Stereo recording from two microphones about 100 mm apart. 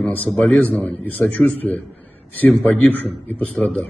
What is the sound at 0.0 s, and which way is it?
A man's voice, 15° left (ahead or behind).